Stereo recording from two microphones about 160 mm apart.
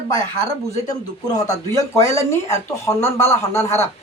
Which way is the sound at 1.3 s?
20° left (ahead or behind).